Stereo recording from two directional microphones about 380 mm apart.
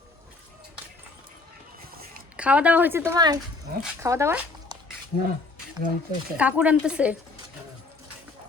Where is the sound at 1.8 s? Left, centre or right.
Right.